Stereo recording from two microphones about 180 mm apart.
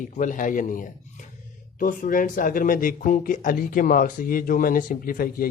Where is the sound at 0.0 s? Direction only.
45° left (ahead or behind).